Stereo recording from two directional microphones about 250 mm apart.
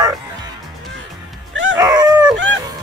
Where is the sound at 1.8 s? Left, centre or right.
Centre.